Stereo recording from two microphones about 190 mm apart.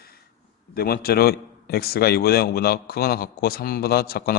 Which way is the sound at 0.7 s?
55° left (ahead or behind).